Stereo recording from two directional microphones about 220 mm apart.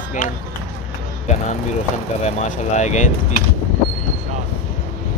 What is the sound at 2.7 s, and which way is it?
Speech, 30° left (ahead or behind).